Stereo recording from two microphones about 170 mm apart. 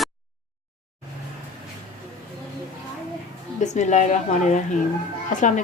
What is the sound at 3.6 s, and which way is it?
A woman's voice, 45° left (ahead or behind).